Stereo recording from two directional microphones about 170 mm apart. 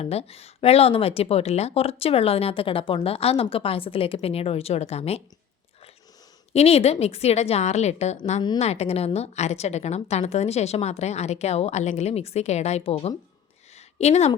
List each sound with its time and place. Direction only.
0.0 s speech: 35° left (ahead or behind)
6.5 s speech: 35° left (ahead or behind)
13.7 s a sound: 40° left (ahead or behind)